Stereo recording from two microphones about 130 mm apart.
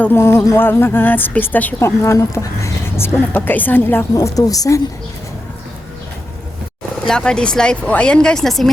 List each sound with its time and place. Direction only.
0.0 s a woman's voice: 20° left (ahead or behind)
7.0 s speech: 5° left (ahead or behind)